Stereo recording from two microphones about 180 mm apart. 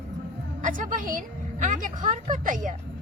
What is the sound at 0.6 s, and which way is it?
A woman's voice, 45° right (ahead or behind).